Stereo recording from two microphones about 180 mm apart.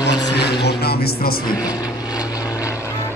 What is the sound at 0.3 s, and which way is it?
Vehicle, 65° left (ahead or behind).